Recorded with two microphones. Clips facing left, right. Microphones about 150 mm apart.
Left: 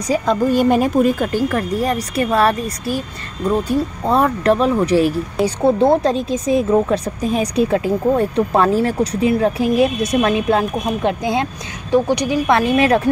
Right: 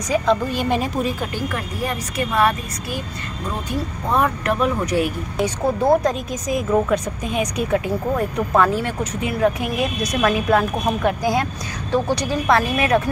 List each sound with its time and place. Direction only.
0.1 s speech: 45° left (ahead or behind)
3.6 s speech: 35° left (ahead or behind)